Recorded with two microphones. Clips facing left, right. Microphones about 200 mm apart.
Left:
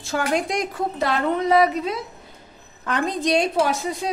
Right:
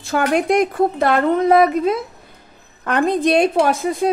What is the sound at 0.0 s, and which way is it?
A woman's voice, 60° right (ahead or behind).